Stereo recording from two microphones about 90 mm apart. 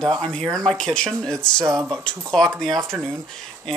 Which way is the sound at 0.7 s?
10° left (ahead or behind).